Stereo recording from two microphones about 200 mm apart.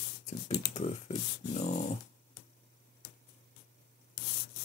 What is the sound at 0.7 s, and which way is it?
Speech, 35° left (ahead or behind).